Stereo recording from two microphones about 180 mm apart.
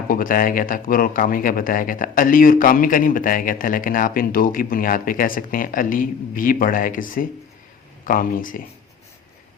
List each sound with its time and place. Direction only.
0.1 s speech: 50° left (ahead or behind)